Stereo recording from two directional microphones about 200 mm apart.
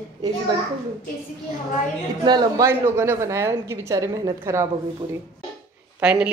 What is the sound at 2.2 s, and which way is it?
A woman's voice, 20° right (ahead or behind).